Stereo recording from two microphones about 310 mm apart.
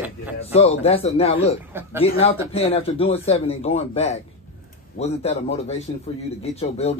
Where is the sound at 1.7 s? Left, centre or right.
Centre.